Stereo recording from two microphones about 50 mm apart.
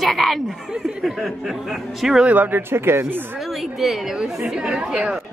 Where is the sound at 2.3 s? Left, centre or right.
Right.